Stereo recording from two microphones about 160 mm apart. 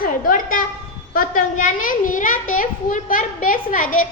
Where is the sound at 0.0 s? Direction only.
60° left (ahead or behind).